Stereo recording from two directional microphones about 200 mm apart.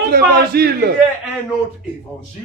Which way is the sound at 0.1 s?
50° right (ahead or behind).